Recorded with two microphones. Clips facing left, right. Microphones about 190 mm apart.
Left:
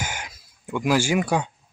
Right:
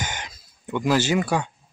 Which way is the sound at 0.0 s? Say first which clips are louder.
Even; 10° left (ahead or behind).